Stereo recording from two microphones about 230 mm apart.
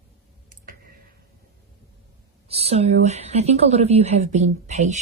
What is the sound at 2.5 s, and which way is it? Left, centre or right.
Speech, right.